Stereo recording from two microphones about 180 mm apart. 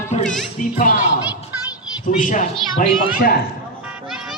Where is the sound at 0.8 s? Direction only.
50° left (ahead or behind).